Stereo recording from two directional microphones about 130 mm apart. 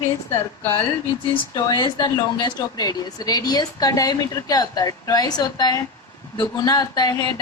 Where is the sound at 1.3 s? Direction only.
30° left (ahead or behind).